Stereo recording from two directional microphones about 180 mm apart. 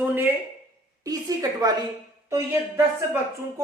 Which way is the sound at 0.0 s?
10° right (ahead or behind).